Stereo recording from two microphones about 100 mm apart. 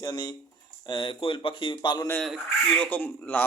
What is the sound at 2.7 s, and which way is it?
Speech, 10° left (ahead or behind).